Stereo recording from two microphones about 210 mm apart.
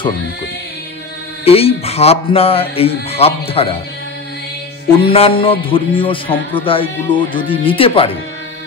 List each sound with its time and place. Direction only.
1.4 s a man's voice: 30° left (ahead or behind)
5.0 s a man's voice: 25° left (ahead or behind)